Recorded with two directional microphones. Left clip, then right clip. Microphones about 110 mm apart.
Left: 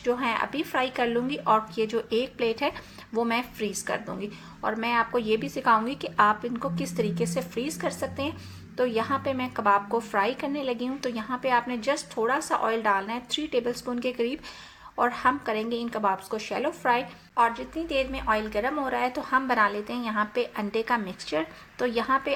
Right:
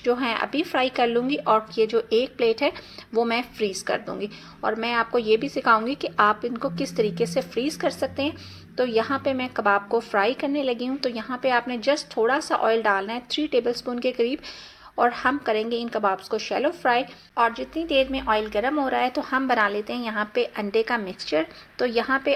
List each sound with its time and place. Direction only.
0.0 s a woman's voice: 30° right (ahead or behind)